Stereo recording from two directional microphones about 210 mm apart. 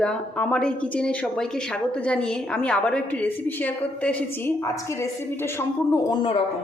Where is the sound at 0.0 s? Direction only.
5° left (ahead or behind); by 6.4 s 20° left (ahead or behind).